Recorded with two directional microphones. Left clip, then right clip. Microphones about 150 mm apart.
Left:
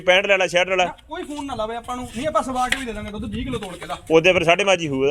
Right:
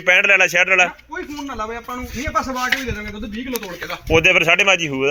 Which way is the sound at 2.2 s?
20° left (ahead or behind).